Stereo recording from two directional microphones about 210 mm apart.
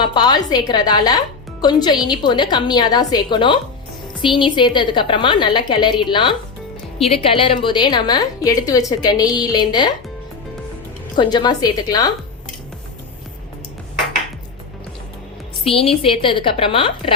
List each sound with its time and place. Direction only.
0.0 s a woman's voice: 20° left (ahead or behind)
11.2 s a woman's voice: 20° left (ahead or behind)
15.6 s a woman's voice: 25° left (ahead or behind)